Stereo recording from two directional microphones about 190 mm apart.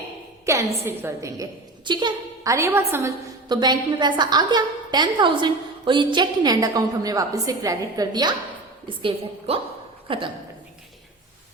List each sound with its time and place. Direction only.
0.4 s a woman's voice: 15° right (ahead or behind)
3.5 s a woman's voice: 20° right (ahead or behind)